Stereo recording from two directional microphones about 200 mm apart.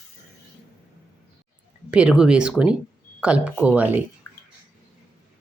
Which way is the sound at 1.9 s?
5° right (ahead or behind).